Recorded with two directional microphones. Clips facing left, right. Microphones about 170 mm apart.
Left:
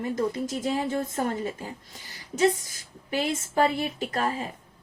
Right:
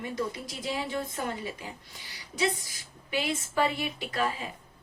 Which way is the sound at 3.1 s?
40° left (ahead or behind).